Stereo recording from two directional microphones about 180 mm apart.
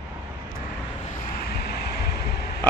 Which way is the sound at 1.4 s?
65° left (ahead or behind).